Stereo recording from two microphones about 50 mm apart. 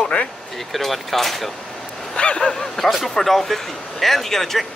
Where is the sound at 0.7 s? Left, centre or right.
Centre.